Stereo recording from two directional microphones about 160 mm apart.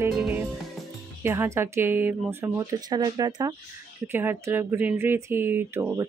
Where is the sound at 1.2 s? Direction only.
15° right (ahead or behind).